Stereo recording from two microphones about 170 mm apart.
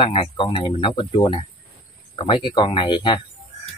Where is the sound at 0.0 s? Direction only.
30° left (ahead or behind).